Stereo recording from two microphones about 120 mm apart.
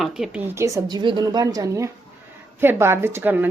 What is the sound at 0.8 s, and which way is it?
A woman's voice, 35° right (ahead or behind).